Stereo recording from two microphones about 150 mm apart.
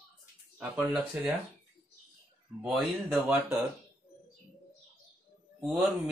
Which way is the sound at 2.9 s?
15° right (ahead or behind).